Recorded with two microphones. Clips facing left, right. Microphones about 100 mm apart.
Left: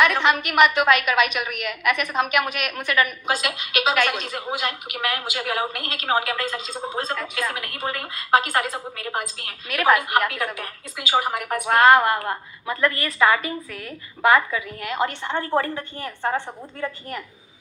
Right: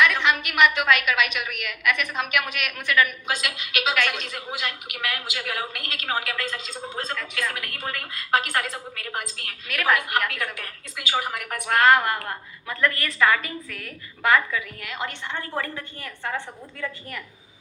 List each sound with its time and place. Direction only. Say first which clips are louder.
0.0 s a woman's voice: left 2 dB; 40° left (ahead or behind)